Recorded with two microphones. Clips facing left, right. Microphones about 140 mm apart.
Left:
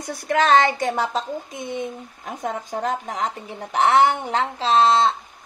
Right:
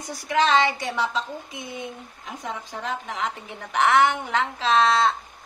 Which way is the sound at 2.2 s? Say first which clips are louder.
Left 5 dB; 45° left (ahead or behind).